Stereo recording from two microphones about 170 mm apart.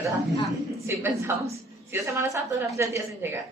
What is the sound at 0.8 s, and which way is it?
A woman's voice, 15° right (ahead or behind).